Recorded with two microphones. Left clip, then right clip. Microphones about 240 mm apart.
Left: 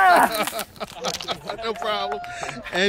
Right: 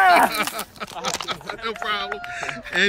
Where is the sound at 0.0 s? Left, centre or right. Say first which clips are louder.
Even; centre.